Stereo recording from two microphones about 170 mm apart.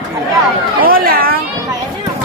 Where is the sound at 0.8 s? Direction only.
60° right (ahead or behind).